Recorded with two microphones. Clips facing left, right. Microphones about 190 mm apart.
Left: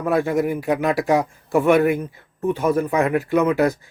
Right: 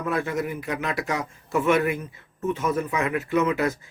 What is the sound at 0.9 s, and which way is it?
Speech, 50° left (ahead or behind).